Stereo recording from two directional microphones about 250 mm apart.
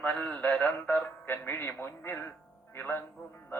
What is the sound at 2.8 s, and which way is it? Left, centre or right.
Speech, centre.